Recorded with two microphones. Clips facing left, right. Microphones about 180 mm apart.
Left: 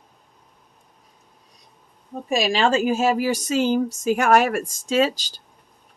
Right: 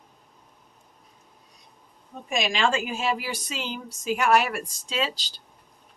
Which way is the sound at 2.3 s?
35° left (ahead or behind).